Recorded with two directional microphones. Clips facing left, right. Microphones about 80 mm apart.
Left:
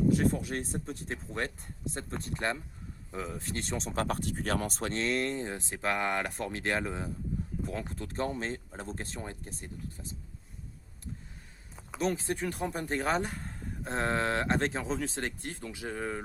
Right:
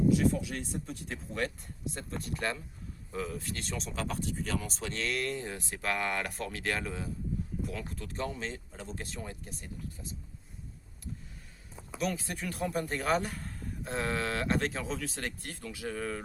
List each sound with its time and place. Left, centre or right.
0.1 s speech: left
3.3 s speech: left
4.0 s speech: left
4.9 s speech: left
11.9 s speech: left